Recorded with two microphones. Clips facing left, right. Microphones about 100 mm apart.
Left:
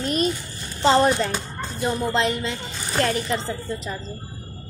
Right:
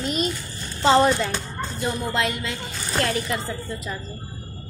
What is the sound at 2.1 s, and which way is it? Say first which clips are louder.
A woman's voice: left 2 dB; 25° left (ahead or behind).